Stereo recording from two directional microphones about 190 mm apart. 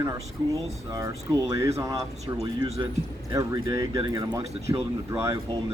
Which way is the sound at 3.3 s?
20° right (ahead or behind).